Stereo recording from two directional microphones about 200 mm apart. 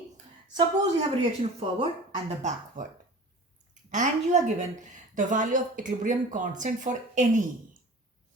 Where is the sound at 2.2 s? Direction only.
35° right (ahead or behind).